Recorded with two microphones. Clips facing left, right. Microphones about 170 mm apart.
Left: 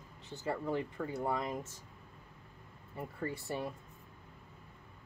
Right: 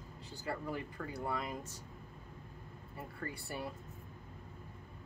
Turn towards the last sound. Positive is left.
turn(degrees=25)  # may be behind; listen again after turning